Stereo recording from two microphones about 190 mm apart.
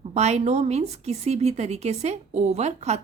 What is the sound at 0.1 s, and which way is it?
A woman's voice, 35° right (ahead or behind).